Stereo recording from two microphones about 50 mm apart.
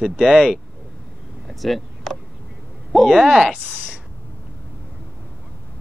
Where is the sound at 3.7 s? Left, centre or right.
Right.